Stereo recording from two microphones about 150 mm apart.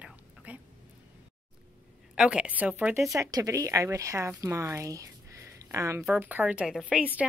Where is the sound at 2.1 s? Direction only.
5° right (ahead or behind).